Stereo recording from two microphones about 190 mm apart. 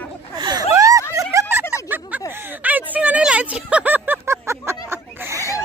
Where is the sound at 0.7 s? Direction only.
15° right (ahead or behind).